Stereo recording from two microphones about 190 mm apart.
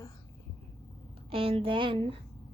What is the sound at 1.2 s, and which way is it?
Speech, 30° right (ahead or behind).